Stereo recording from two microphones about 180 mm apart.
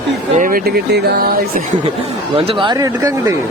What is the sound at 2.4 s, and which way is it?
Speech, 30° right (ahead or behind).